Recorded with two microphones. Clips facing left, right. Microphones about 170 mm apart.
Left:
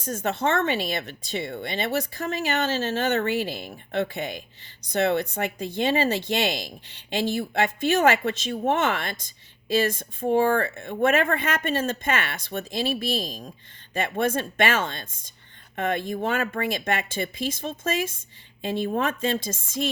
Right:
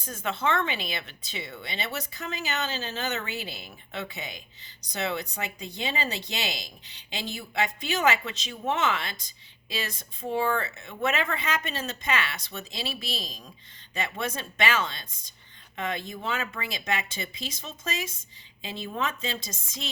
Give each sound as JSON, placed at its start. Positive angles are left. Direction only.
{"t": 0.0, "sound": "speech", "side_deg": 45}